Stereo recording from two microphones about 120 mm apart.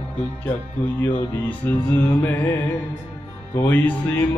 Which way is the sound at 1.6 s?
15° left (ahead or behind).